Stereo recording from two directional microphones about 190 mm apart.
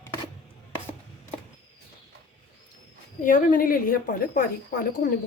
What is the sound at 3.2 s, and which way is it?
A woman's voice, 45° left (ahead or behind).